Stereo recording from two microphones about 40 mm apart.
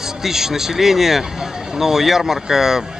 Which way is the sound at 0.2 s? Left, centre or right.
Centre.